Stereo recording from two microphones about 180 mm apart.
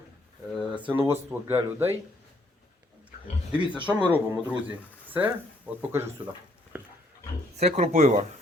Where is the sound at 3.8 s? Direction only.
5° right (ahead or behind).